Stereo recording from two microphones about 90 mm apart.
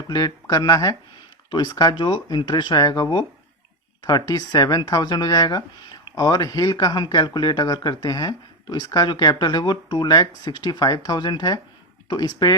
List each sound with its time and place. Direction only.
0.1 s speech: 50° left (ahead or behind)